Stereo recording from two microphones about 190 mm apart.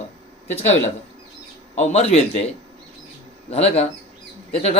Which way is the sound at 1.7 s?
35° left (ahead or behind).